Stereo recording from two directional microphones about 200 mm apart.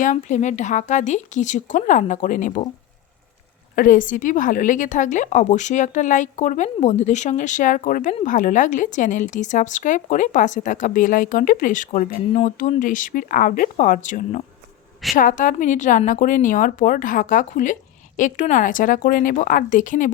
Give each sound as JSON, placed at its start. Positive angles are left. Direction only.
{"t": 0.0, "sound": "speech", "side_deg": 40}
{"t": 3.8, "sound": "speech", "side_deg": 40}